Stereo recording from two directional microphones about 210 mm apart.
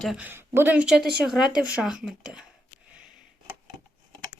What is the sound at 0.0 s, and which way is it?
Speech, 5° right (ahead or behind).